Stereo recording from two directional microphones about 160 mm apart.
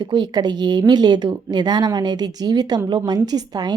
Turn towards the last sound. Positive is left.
turn(degrees=-25)  # may be behind; listen again after turning